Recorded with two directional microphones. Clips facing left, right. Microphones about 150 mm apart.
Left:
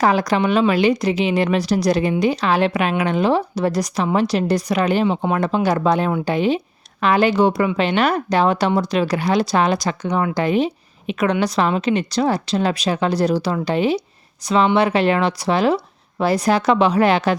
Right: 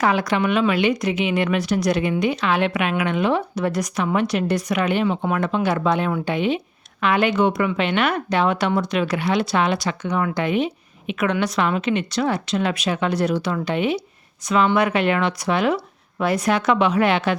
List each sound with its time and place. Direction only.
0.0 s a woman's voice: 35° left (ahead or behind)